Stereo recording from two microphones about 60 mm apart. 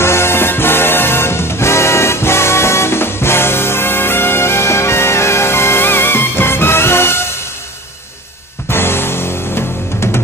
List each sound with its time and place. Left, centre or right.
0.0 s music: left
8.6 s music: left